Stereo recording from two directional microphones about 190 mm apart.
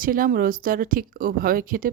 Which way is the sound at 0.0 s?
50° right (ahead or behind).